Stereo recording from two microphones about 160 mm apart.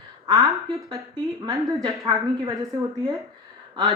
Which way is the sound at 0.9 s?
25° right (ahead or behind).